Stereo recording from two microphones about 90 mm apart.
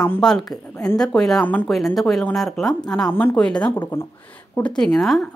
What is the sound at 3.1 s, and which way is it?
Speech, 20° left (ahead or behind).